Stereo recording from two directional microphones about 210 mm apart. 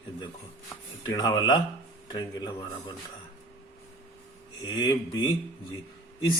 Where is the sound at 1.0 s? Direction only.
20° left (ahead or behind).